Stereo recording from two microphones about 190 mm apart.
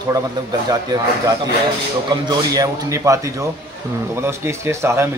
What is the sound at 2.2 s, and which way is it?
Speech, 20° right (ahead or behind).